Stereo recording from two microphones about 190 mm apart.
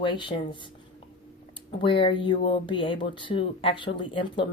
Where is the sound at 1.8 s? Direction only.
25° left (ahead or behind).